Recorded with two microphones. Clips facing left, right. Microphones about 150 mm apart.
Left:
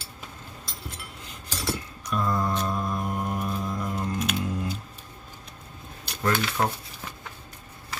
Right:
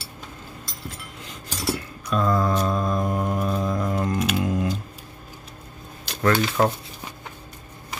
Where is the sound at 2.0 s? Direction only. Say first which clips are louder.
Right 5 dB; 90° right.